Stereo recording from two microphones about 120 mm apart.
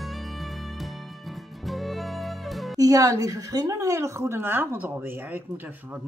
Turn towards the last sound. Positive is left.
turn(degrees=-15)  # may be behind; listen again after turning